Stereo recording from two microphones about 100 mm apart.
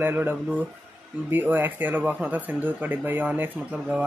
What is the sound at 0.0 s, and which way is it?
Speech, 20° right (ahead or behind).